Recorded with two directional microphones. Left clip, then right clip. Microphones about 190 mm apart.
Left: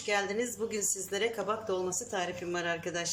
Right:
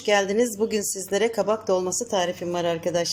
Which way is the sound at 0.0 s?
35° right (ahead or behind).